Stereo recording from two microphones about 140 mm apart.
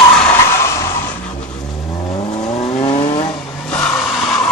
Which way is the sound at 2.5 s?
45° left (ahead or behind).